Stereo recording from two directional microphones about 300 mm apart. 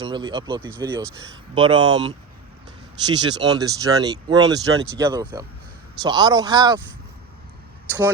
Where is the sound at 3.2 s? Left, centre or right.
Centre.